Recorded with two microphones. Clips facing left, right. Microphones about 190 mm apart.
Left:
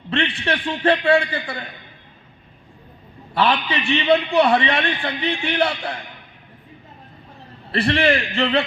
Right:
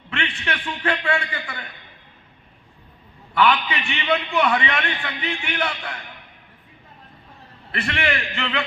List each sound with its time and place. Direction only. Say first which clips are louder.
0.1 s a man's voice: left 6 dB; 30° left (ahead or behind)
3.3 s a man's voice: even; 35° left (ahead or behind)
7.7 s a man's voice: left 7 dB; 35° left (ahead or behind)